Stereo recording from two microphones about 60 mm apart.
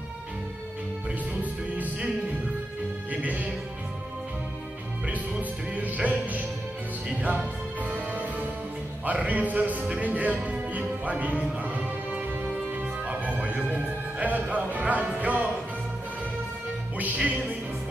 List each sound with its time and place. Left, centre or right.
1.4 s music: right
3.1 s music: right
5.0 s music: right